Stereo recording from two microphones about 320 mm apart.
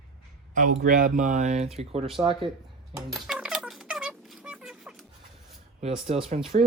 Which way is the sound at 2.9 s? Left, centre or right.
Centre.